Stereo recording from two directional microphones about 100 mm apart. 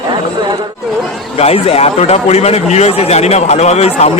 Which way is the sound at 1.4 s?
80° left.